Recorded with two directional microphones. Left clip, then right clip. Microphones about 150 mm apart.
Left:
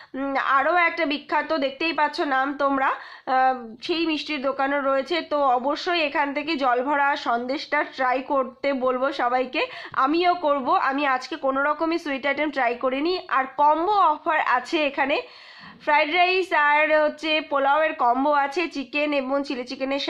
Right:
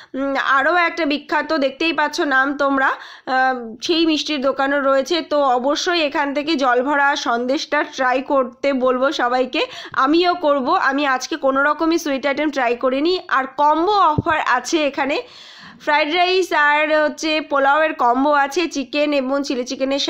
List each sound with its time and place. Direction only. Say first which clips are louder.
0.2 s a woman's voice: right 4 dB; 35° right (ahead or behind)